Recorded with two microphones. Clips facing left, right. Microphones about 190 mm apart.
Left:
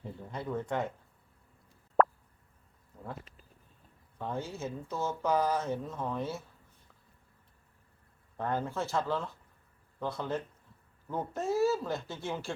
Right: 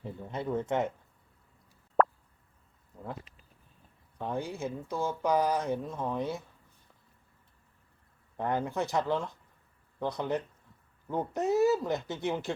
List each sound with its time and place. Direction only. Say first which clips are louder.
0.3 s speech: right 4 dB; 20° right (ahead or behind)
2.0 s plop: even; centre (ahead or behind)
4.2 s speech: right 3 dB; 15° right (ahead or behind)
8.4 s speech: right 2 dB; 15° right (ahead or behind)